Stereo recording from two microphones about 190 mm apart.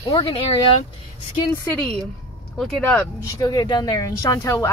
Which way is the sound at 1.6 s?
10° left (ahead or behind).